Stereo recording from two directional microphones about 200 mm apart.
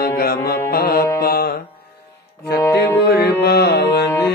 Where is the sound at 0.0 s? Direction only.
50° left (ahead or behind).